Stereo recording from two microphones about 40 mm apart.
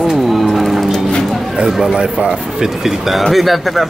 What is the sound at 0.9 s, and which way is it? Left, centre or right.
Music, centre.